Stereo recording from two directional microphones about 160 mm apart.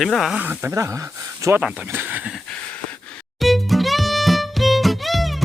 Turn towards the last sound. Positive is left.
turn(degrees=0)  # may be behind; listen again after turning